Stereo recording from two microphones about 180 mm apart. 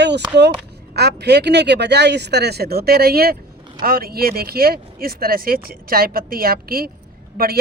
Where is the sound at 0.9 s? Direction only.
65° right (ahead or behind).